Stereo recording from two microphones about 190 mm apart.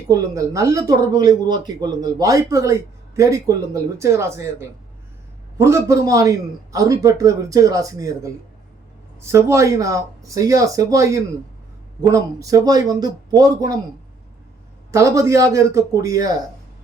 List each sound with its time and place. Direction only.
0.1 s speech: 15° right (ahead or behind)
14.9 s speech: 15° right (ahead or behind)